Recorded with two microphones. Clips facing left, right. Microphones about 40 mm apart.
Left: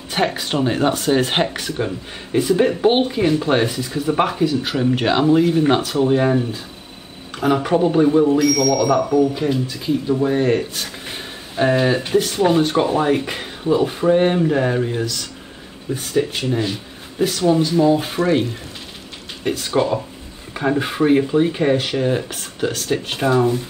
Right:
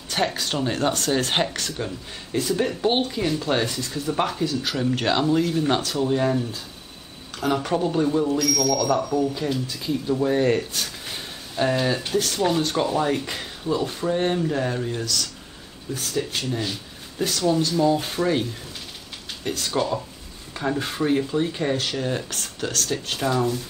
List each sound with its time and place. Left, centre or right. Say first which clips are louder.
0.1 s speech: left 4 dB; left
8.7 s speech: left 5 dB; left
9.3 s speech: left 6 dB; centre